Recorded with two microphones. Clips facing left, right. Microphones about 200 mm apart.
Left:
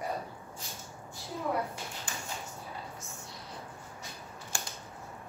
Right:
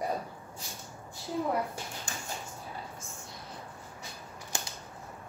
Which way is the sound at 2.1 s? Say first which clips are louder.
Even; 45° right (ahead or behind).